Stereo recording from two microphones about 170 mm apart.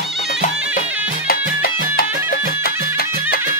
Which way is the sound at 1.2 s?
65° left (ahead or behind).